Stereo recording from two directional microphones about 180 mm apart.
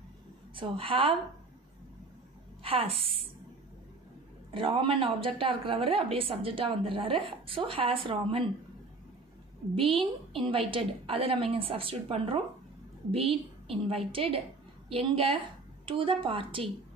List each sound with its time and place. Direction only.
0.6 s a woman's voice: 30° right (ahead or behind)
2.6 s a woman's voice: 30° right (ahead or behind)
4.6 s a woman's voice: 30° right (ahead or behind)
9.8 s a woman's voice: 30° right (ahead or behind)